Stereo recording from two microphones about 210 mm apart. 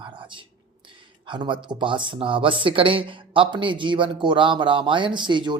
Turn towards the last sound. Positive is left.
turn(degrees=-20)  # may be behind; listen again after turning